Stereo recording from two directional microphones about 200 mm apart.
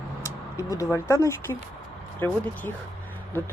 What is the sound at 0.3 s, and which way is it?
Speech, 15° left (ahead or behind).